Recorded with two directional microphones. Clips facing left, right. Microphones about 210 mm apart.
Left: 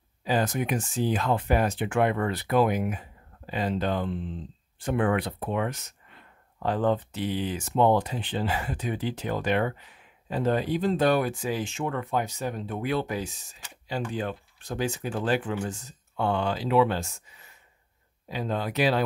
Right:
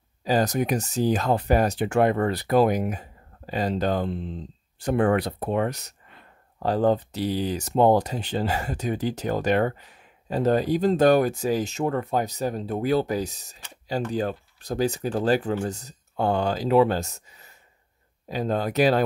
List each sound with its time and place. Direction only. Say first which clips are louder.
0.2 s speech: right 4 dB; 40° right (ahead or behind)